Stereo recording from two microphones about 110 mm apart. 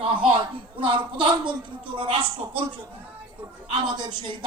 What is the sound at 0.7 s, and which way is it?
Speech, 50° right (ahead or behind).